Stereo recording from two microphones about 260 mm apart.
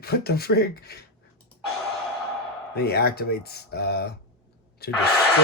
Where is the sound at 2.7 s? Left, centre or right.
Left.